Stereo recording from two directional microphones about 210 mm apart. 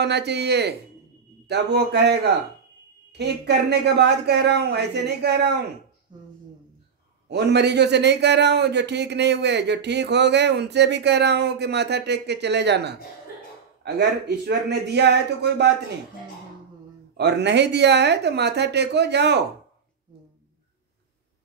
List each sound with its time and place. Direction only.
0.0 s a man's voice: 55° right (ahead or behind)
7.2 s a man's voice: 50° right (ahead or behind)
17.2 s a man's voice: 55° right (ahead or behind)